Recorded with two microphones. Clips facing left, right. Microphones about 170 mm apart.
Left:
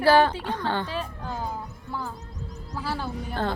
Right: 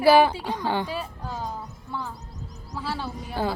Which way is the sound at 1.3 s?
Centre (ahead or behind).